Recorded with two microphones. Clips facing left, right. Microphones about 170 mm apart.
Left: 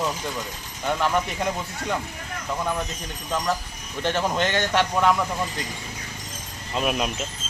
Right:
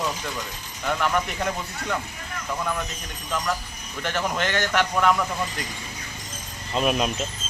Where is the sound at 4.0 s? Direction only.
25° left (ahead or behind).